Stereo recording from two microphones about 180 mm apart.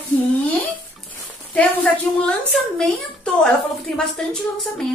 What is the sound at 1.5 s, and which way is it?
A woman's voice, 5° left (ahead or behind).